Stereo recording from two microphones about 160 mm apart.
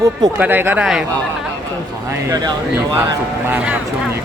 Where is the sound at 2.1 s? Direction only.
15° right (ahead or behind).